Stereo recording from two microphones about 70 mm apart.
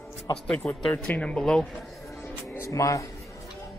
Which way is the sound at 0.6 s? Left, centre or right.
Left.